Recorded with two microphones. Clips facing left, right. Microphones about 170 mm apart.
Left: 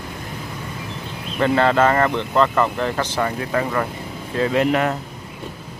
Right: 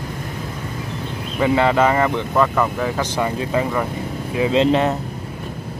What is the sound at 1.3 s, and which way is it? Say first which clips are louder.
Speech: even; 10° right (ahead or behind).